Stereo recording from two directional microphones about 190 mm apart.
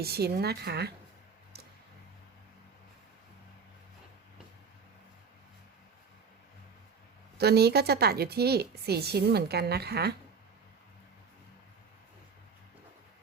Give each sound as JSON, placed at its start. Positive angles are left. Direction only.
{"t": 0.0, "sound": "a woman's voice", "side_deg": -55}
{"t": 1.5, "sound": "a sound", "side_deg": -55}
{"t": 7.3, "sound": "a woman's voice", "side_deg": -55}